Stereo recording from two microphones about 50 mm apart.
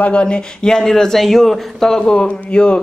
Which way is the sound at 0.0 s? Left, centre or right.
Left.